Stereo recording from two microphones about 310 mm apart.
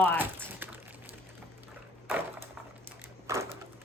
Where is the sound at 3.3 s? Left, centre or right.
Centre.